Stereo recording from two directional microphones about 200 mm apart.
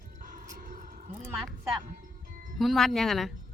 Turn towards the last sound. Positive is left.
turn(degrees=0)  # may be behind; listen again after turning